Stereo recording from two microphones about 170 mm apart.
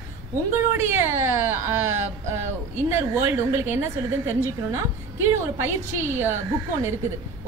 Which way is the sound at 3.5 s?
15° right (ahead or behind).